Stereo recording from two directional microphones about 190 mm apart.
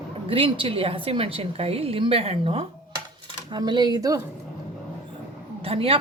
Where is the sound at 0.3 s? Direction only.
25° right (ahead or behind).